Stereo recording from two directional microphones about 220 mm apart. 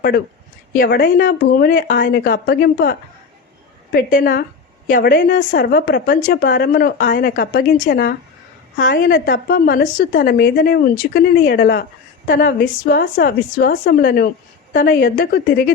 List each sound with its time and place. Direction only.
0.7 s speech: 40° left (ahead or behind)
3.9 s a woman's voice: 40° left (ahead or behind)